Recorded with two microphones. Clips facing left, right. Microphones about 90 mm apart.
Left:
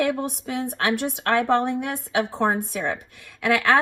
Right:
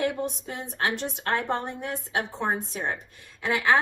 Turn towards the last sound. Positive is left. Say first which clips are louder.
# left 4 dB
turn(degrees=60)  # may be behind; listen again after turning